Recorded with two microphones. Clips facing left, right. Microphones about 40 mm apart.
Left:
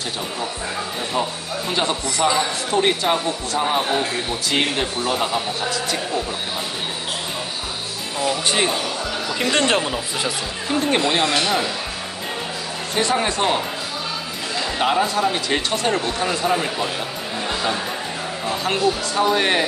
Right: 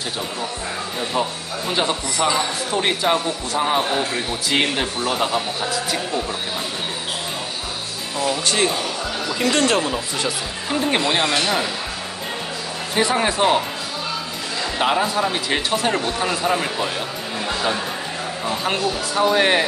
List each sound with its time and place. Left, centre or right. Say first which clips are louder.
1.7 s a man's voice: right 1 dB; centre
8.5 s speech: even; centre
9.4 s speech: right 1 dB; left
10.2 s a man's voice: even; centre
12.9 s speech: right 1 dB; centre
14.8 s a man's voice: even; centre
17.5 s music: right 1 dB; centre
18.6 s speech: left 3 dB; centre